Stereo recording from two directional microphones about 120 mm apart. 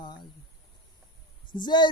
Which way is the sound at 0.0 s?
40° left (ahead or behind).